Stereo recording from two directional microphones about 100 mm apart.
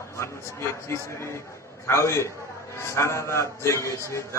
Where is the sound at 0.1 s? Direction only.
30° left (ahead or behind).